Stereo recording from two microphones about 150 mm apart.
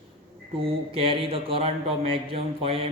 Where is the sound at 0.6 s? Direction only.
40° right (ahead or behind).